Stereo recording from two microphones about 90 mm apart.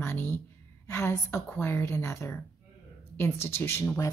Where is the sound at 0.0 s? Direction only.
25° left (ahead or behind).